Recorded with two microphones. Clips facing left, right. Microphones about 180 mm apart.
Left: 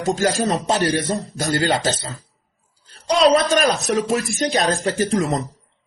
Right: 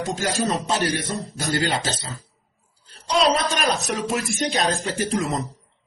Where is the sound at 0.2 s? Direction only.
40° left (ahead or behind).